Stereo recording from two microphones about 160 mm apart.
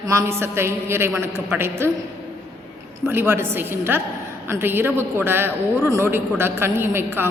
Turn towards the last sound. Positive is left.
turn(degrees=-15)  # may be behind; listen again after turning